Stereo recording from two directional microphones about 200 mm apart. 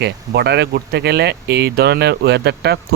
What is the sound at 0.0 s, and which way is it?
Speech, 55° right (ahead or behind).